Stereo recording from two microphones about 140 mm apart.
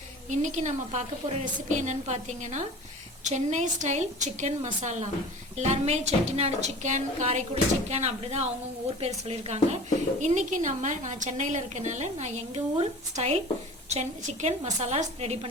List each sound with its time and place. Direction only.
0.3 s a woman's voice: 60° right (ahead or behind)
10.2 s a woman's voice: 60° right (ahead or behind)
12.7 s a woman's voice: 45° right (ahead or behind)